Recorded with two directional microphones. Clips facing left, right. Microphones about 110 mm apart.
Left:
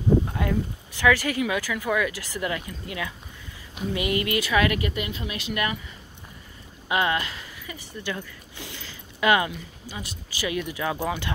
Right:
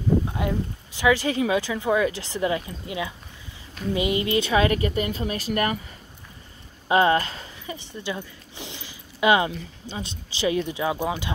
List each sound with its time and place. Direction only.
0.3 s speech: 20° right (ahead or behind)
8.0 s a sound: 20° right (ahead or behind)
9.5 s speech: 30° right (ahead or behind)